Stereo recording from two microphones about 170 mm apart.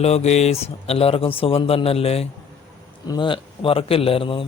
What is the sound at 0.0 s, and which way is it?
A man's voice, 40° left (ahead or behind).